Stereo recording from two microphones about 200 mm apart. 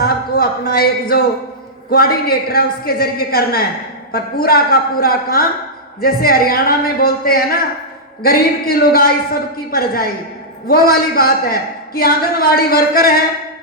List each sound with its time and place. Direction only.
0.0 s a man's voice: 50° left (ahead or behind)